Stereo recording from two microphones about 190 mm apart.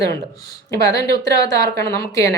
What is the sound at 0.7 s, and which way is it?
Speech, 20° left (ahead or behind).